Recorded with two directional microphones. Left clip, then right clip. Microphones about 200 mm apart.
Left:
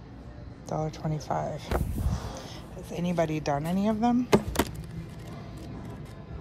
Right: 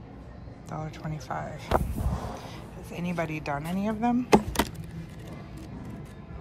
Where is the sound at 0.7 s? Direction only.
15° left (ahead or behind).